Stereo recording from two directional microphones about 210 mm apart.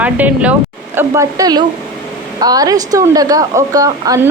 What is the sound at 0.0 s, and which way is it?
A woman's voice, 5° right (ahead or behind).